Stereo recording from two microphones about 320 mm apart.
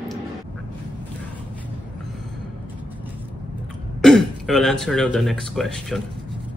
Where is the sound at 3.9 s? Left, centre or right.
Centre.